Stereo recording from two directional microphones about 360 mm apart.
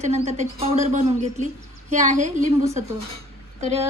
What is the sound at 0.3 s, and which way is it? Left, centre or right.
A woman's voice, centre.